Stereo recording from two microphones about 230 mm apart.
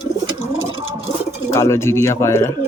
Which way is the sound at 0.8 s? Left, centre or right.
Right.